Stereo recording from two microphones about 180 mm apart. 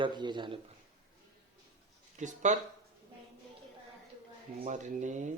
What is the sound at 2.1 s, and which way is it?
Speech, 40° right (ahead or behind).